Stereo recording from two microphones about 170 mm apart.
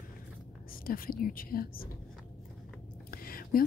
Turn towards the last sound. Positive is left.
turn(degrees=60)  # may be behind; listen again after turning